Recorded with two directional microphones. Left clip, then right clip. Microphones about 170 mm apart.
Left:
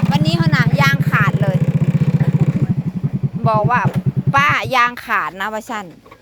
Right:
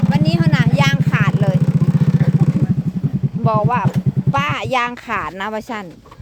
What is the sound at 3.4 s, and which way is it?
Speech, 25° right (ahead or behind).